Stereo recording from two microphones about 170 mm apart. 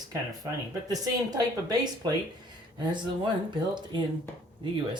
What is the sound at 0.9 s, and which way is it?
Speech, 20° right (ahead or behind).